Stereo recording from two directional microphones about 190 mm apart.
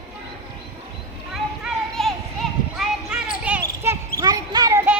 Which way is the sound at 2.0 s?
Centre (ahead or behind).